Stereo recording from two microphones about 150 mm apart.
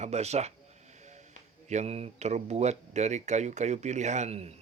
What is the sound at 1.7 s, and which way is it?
Speech, 45° right (ahead or behind).